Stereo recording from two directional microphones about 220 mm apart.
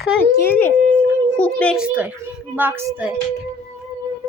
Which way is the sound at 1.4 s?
5° left (ahead or behind).